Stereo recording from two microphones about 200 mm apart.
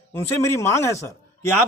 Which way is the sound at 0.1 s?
15° left (ahead or behind).